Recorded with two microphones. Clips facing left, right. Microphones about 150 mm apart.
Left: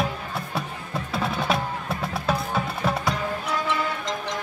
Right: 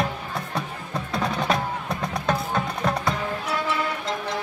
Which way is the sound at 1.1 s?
Centre (ahead or behind).